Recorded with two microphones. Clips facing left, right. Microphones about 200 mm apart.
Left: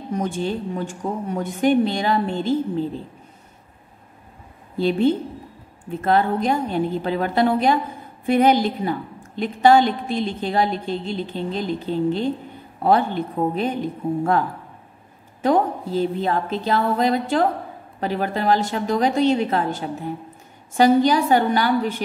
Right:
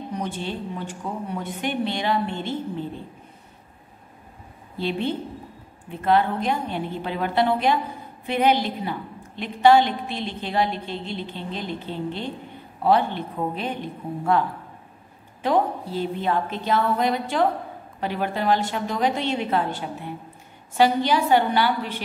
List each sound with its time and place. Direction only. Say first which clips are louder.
0.1 s a woman's voice: left 7 dB; 45° left (ahead or behind)
4.7 s a woman's voice: left 7 dB; 45° left (ahead or behind)
15.4 s a woman's voice: left 3 dB; 45° left (ahead or behind)